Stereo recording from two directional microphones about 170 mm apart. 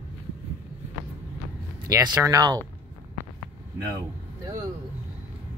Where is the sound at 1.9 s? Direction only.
20° right (ahead or behind).